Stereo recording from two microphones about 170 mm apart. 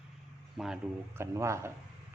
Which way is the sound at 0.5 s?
5° right (ahead or behind).